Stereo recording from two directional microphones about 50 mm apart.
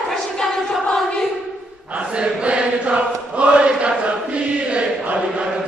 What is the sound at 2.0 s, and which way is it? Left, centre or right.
Chant, centre.